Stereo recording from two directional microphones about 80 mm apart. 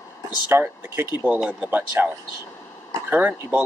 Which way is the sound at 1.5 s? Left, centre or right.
Centre.